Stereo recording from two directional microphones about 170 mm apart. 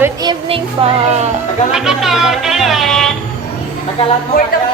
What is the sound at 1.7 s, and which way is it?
Speech, 5° right (ahead or behind).